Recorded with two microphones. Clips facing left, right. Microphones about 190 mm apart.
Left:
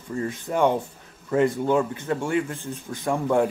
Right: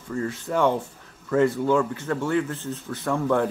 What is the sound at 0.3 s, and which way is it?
Speech, 15° left (ahead or behind).